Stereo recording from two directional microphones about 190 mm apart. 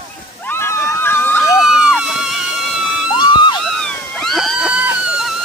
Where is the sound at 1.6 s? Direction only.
5° right (ahead or behind).